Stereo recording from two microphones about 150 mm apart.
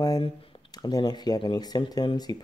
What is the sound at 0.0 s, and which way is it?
Speech, 30° left (ahead or behind).